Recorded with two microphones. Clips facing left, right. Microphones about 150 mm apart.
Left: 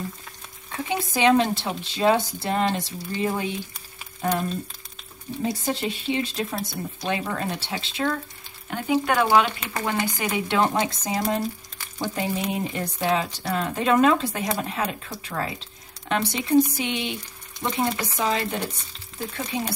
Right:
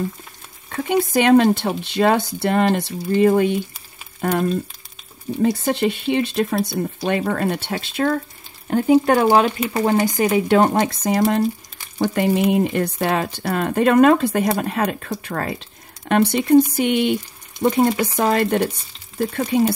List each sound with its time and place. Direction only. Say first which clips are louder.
1.1 s speech: right 5 dB; 55° right (ahead or behind)
8.6 s speech: right 8 dB; 40° right (ahead or behind); by 19.6 s 60° right (ahead or behind)